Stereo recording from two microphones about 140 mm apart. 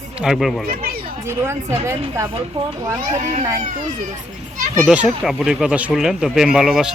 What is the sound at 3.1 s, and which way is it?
Speech, 55° right (ahead or behind).